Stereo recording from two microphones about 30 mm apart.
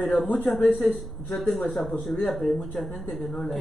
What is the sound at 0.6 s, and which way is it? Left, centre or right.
Speech, left.